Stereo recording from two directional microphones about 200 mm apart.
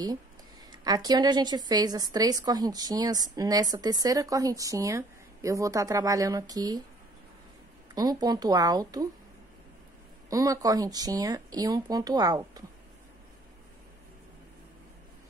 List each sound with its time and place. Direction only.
0.7 s a woman's voice: 20° right (ahead or behind)
7.9 s a woman's voice: 20° right (ahead or behind)
10.3 s a woman's voice: 15° right (ahead or behind)